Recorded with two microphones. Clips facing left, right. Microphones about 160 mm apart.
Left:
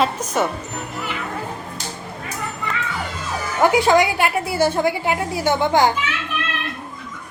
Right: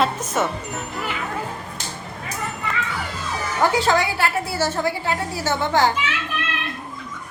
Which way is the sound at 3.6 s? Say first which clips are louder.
Left 4 dB; 15° left (ahead or behind).